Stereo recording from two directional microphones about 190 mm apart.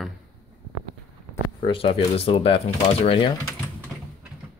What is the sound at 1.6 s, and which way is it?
Speech, 30° left (ahead or behind).